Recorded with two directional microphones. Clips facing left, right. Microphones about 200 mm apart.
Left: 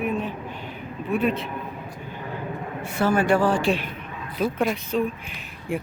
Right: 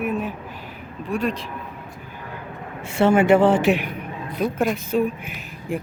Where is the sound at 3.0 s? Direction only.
25° right (ahead or behind).